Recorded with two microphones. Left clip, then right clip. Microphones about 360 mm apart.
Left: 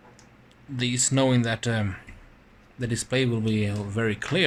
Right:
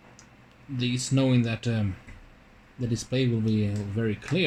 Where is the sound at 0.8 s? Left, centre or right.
Centre.